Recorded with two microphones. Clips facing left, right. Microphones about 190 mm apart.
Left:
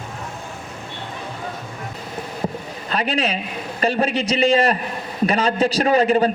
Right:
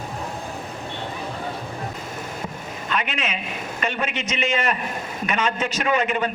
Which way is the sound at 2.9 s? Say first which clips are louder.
Left 5 dB; 35° left (ahead or behind).